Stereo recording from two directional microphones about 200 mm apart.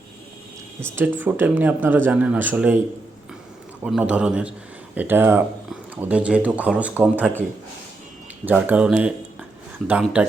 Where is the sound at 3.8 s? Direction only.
5° right (ahead or behind).